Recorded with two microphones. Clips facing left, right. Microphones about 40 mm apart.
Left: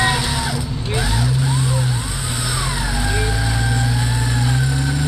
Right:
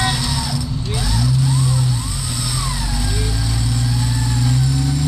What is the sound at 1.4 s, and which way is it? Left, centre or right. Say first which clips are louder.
Vehicle: right 1 dB; left.